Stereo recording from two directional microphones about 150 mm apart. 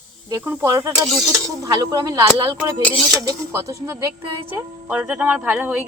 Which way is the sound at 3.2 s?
20° right (ahead or behind).